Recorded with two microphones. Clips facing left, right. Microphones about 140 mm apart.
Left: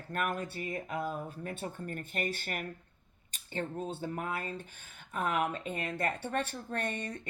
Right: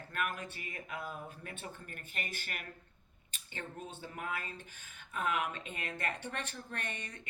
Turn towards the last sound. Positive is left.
turn(degrees=50)  # may be behind; listen again after turning